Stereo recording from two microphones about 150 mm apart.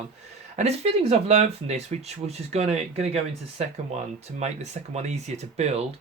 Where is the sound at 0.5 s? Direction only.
45° right (ahead or behind).